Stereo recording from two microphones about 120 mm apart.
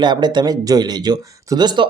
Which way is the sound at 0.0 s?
40° right (ahead or behind).